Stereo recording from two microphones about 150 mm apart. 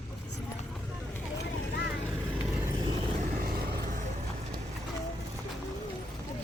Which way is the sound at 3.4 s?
85° right.